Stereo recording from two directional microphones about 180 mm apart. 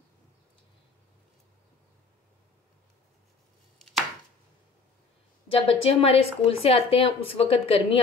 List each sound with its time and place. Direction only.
5.5 s speech: 30° left (ahead or behind)